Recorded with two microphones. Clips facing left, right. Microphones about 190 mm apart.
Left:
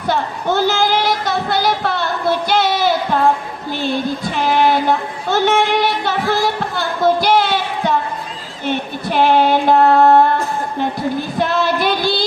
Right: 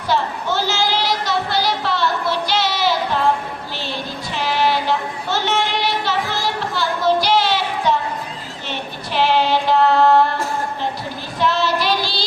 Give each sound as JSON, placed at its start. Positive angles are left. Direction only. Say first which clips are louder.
{"t": 0.1, "sound": "a sound", "louder": "left 2 dB", "side_deg": 50}
{"t": 4.3, "sound": "child singing", "louder": "left 3 dB", "side_deg": 50}
{"t": 8.6, "sound": "female singing", "louder": "left 9 dB", "side_deg": 50}
{"t": 11.3, "sound": "female singing", "louder": "right 1 dB", "side_deg": 50}